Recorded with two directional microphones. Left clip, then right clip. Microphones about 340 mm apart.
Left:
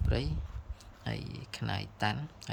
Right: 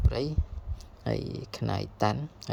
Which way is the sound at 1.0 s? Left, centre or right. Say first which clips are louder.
Right 9 dB; centre.